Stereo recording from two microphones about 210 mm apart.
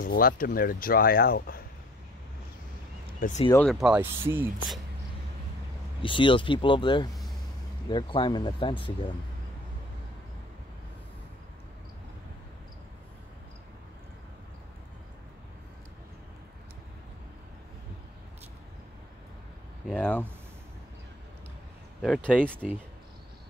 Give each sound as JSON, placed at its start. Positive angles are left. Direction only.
{"t": 0.0, "sound": "a sound", "side_deg": 40}
{"t": 0.3, "sound": "speech", "side_deg": 45}
{"t": 3.2, "sound": "speech", "side_deg": 35}
{"t": 3.8, "sound": "speech", "side_deg": -10}
{"t": 6.0, "sound": "speech", "side_deg": 25}
{"t": 19.9, "sound": "speech", "side_deg": 5}
{"t": 22.0, "sound": "speech", "side_deg": 0}